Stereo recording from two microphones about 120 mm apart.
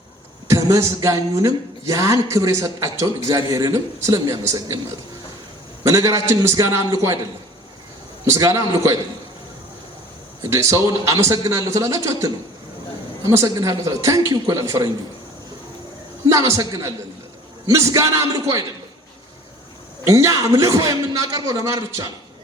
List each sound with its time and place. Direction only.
0.4 s speech: 25° right (ahead or behind)
5.8 s speech: 25° right (ahead or behind)
8.2 s speech: 25° right (ahead or behind)
10.4 s speech: 25° right (ahead or behind)
16.2 s speech: 25° right (ahead or behind)
20.1 s speech: 25° right (ahead or behind)